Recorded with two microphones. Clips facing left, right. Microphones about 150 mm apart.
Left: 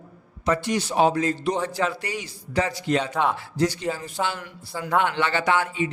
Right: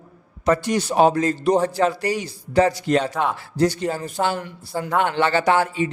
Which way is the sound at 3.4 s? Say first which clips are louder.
Right 4 dB; 35° right (ahead or behind).